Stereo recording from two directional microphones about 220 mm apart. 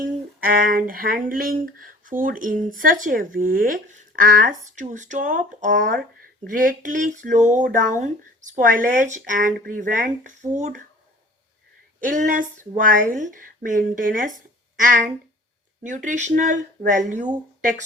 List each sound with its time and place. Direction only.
0.0 s speech: 40° right (ahead or behind)
11.9 s speech: 35° right (ahead or behind)